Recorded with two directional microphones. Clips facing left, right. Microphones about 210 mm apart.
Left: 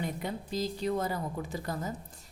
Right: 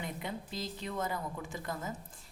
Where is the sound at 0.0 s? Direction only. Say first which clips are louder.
Left 5 dB; 40° left (ahead or behind).